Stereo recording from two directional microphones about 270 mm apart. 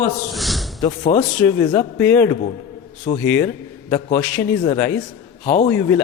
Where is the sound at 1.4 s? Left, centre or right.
Centre.